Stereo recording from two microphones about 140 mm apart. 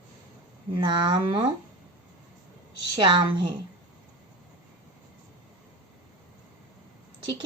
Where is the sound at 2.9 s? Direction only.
35° right (ahead or behind).